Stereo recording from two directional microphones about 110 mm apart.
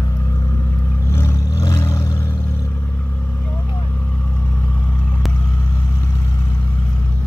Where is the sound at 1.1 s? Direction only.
20° left (ahead or behind).